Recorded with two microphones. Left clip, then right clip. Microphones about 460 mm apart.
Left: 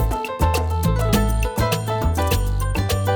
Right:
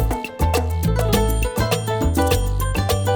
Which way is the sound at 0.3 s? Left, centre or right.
Right.